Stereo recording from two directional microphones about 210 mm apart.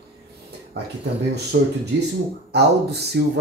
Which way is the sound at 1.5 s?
55° right (ahead or behind).